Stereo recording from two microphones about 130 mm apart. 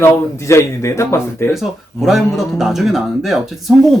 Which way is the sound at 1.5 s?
Centre (ahead or behind).